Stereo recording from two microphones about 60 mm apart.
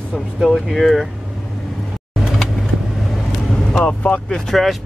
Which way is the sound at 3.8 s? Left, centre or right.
Left.